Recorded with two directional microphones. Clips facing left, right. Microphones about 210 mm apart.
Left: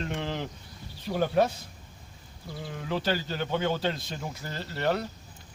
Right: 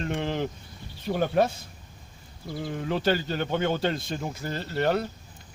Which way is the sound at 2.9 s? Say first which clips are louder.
Right 3 dB; 55° right (ahead or behind).